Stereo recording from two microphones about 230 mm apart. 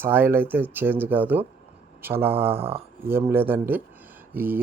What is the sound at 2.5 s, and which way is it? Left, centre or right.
Speech, right.